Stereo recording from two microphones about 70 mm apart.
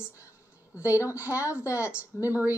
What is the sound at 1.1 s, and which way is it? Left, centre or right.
A woman's voice, right.